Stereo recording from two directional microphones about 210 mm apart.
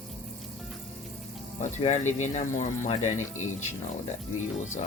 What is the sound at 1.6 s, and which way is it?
Speech, 35° left (ahead or behind).